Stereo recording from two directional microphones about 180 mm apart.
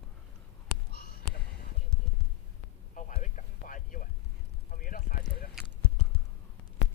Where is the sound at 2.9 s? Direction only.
45° left (ahead or behind).